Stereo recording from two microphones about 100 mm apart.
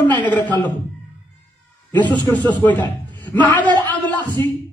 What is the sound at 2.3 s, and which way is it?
Speech, 45° right (ahead or behind).